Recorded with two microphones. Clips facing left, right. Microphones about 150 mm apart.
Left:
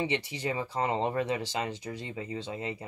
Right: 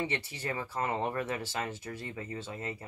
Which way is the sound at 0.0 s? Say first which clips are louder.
Left 4 dB; 15° left (ahead or behind).